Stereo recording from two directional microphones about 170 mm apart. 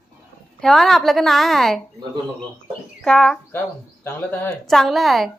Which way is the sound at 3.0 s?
5° left (ahead or behind).